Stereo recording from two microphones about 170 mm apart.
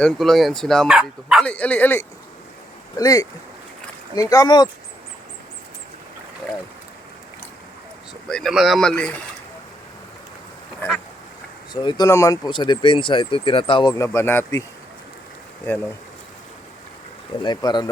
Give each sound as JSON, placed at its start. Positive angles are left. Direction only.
{"t": 0.0, "sound": "speech", "side_deg": 5}
{"t": 1.5, "sound": "speech", "side_deg": 10}
{"t": 8.3, "sound": "speech", "side_deg": 0}
{"t": 11.7, "sound": "speech", "side_deg": 25}
{"t": 13.9, "sound": "speech", "side_deg": 15}
{"t": 17.4, "sound": "speech", "side_deg": 25}